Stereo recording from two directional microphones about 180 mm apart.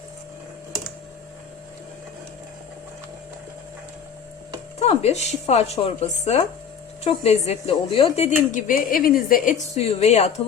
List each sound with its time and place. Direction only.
4.8 s speech: 35° left (ahead or behind)
8.5 s a woman's voice: 50° left (ahead or behind)